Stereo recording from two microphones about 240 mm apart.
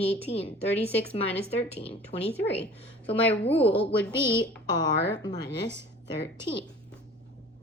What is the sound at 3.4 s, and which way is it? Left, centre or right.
A woman's voice, left.